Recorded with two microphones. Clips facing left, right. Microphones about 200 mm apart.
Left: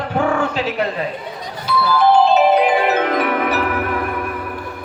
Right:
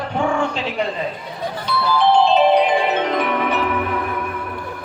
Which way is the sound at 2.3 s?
5° left (ahead or behind).